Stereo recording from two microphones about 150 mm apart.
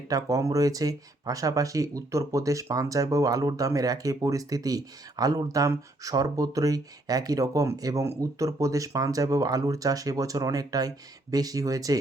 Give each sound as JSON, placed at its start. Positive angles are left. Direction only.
{"t": 0.1, "sound": "speech", "side_deg": -25}